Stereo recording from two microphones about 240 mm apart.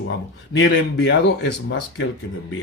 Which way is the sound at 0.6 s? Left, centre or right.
Left.